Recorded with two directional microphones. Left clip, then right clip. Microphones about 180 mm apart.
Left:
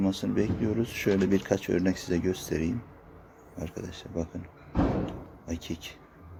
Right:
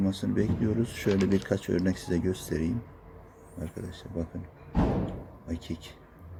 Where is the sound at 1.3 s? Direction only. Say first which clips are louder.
Left 2 dB; 20° right (ahead or behind).